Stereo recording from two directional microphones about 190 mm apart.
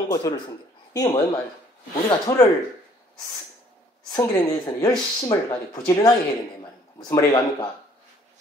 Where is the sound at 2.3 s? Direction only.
15° left (ahead or behind).